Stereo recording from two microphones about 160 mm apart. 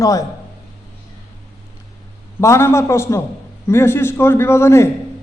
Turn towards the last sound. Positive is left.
turn(degrees=15)  # may be behind; listen again after turning